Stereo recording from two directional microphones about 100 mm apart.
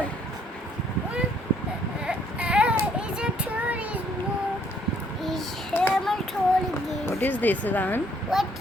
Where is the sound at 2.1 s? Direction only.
10° right (ahead or behind).